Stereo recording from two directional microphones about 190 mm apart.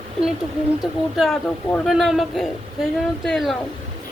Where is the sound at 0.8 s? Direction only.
Centre (ahead or behind).